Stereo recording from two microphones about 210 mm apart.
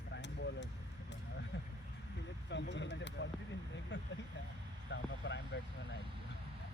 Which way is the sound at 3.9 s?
55° left (ahead or behind).